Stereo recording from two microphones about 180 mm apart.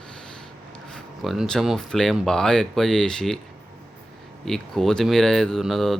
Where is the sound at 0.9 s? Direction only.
Centre (ahead or behind).